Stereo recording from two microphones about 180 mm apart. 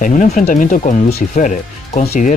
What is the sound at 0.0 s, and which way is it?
Speech, 45° left (ahead or behind).